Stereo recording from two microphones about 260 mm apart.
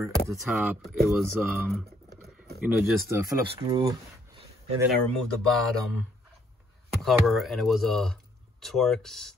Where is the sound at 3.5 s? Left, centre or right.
Centre.